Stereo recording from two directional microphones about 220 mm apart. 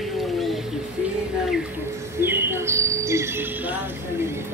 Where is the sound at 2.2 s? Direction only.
10° right (ahead or behind).